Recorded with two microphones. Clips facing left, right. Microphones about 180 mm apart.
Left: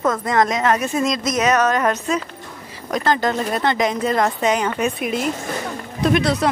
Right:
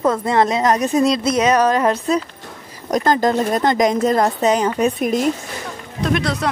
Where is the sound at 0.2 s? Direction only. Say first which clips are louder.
Right 2 dB; 30° right (ahead or behind).